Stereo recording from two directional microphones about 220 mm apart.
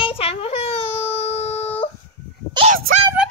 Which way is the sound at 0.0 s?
25° left (ahead or behind).